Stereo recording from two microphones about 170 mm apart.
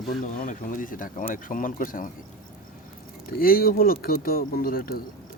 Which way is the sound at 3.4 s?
60° left (ahead or behind).